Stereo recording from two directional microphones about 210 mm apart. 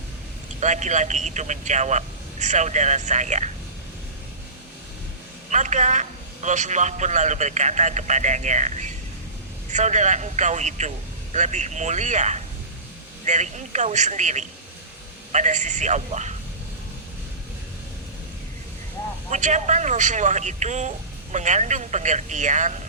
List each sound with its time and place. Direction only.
0.6 s a man's voice: 35° right (ahead or behind)
5.5 s a man's voice: 35° right (ahead or behind)
19.3 s a man's voice: 35° right (ahead or behind)